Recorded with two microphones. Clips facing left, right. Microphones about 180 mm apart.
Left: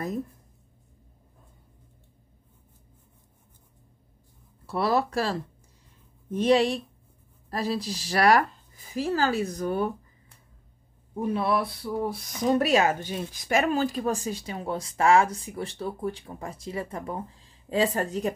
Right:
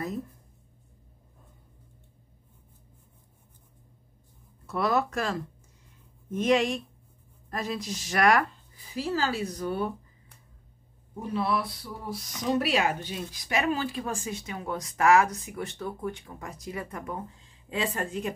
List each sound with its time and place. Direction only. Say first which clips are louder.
4.6 s speech: left 2 dB; 30° left (ahead or behind)
8.9 s speech: left 3 dB; 45° left (ahead or behind)
11.3 s speech: even; 55° left (ahead or behind); by 18.3 s 40° left (ahead or behind)